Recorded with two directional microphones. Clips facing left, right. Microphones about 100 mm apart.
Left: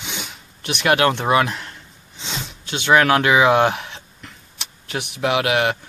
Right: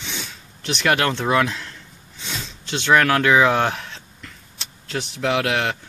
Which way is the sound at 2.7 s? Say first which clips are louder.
Left 2 dB; 10° left (ahead or behind).